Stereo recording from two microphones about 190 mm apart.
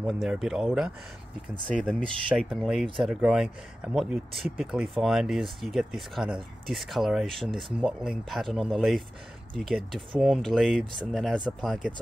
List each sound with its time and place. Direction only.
0.0 s speech: centre (ahead or behind)
2.2 s speech: centre (ahead or behind)